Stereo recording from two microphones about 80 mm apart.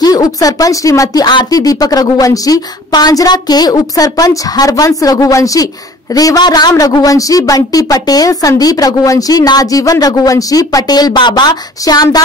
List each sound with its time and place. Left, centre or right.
0.0 s a woman's voice: left
11.8 s a woman's voice: left